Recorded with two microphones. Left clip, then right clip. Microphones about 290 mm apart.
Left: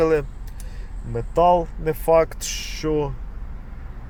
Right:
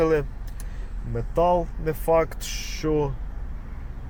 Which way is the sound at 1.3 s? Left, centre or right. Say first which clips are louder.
Left 4 dB; left.